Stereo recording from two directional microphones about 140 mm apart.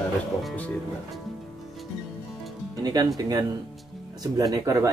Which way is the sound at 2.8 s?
25° right (ahead or behind).